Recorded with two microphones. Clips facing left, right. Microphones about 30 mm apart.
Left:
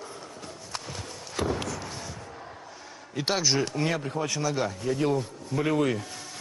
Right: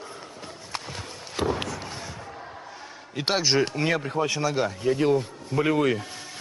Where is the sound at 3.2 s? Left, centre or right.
Right.